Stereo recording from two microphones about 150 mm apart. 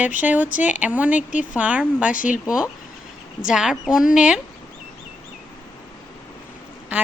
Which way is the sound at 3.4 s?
5° right (ahead or behind).